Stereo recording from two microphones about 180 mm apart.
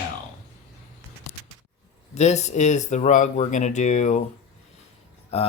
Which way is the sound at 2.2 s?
40° left (ahead or behind).